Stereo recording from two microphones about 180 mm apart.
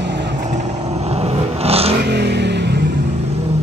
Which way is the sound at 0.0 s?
75° right (ahead or behind).